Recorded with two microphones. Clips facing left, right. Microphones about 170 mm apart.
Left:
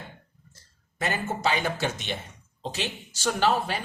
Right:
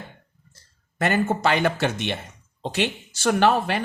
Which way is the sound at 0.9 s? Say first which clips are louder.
Right 7 dB; 60° right (ahead or behind).